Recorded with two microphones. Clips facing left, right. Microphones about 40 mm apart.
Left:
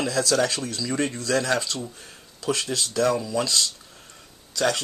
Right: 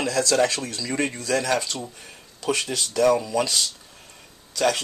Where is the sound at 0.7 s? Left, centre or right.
Centre.